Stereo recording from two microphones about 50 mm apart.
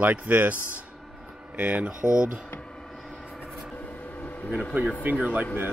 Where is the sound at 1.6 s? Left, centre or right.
Right.